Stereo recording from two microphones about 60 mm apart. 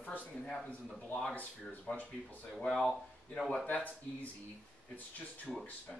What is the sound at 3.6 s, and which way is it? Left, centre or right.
Speech, left.